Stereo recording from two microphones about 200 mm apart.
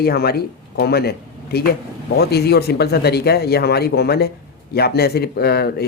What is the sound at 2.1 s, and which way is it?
Speech, 55° left (ahead or behind).